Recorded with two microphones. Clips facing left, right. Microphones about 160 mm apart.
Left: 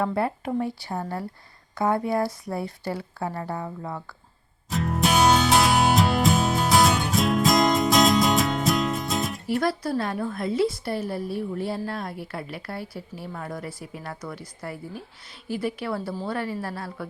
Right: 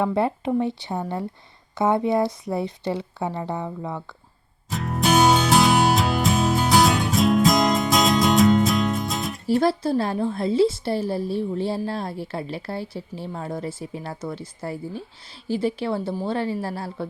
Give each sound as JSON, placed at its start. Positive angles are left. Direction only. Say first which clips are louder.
{"t": 0.0, "sound": "a woman's voice", "louder": "right 3 dB", "side_deg": -20}
{"t": 4.7, "sound": "music", "louder": "right 2 dB", "side_deg": 0}
{"t": 9.5, "sound": "a woman's voice", "louder": "right 6 dB", "side_deg": -30}